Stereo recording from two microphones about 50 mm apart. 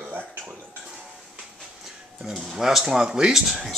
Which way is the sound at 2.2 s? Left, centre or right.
Centre.